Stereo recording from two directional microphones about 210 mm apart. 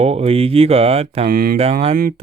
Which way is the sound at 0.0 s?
30° right (ahead or behind).